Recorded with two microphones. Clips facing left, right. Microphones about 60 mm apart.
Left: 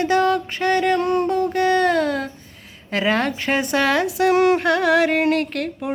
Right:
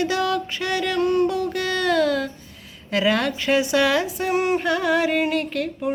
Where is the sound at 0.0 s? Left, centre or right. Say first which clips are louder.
Left 4 dB; left.